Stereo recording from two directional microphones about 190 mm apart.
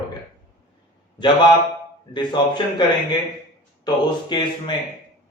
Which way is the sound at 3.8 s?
25° left (ahead or behind).